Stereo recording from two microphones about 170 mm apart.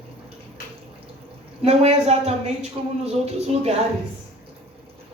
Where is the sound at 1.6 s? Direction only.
40° right (ahead or behind).